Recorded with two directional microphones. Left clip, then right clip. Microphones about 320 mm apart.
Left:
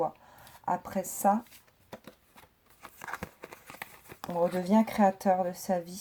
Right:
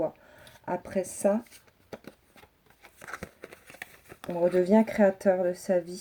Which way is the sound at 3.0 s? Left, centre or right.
Centre.